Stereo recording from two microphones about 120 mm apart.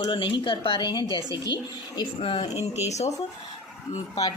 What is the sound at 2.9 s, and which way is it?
Speech, 70° left (ahead or behind).